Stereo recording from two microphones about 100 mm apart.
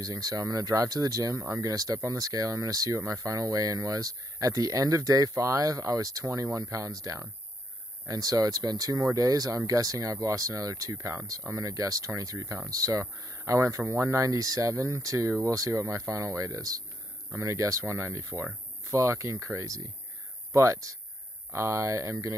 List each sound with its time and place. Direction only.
0.0 s speech: 40° right (ahead or behind)